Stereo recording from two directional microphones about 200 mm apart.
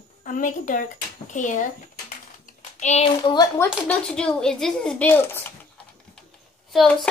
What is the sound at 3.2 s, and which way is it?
Speech, 20° left (ahead or behind).